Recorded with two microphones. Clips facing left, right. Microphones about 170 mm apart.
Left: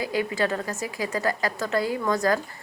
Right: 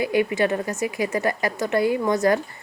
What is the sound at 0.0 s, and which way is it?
Speech, 20° right (ahead or behind).